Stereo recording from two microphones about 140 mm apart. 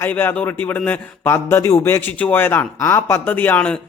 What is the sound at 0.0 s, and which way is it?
A man's voice, 15° left (ahead or behind).